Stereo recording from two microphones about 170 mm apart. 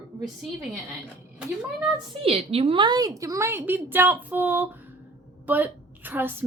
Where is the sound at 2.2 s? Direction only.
35° right (ahead or behind).